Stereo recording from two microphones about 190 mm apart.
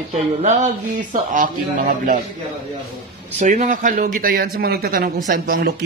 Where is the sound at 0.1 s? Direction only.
40° right (ahead or behind).